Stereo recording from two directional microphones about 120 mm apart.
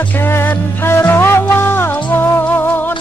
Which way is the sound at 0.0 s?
15° left (ahead or behind).